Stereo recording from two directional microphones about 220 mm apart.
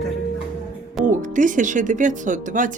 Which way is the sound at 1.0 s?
35° right (ahead or behind).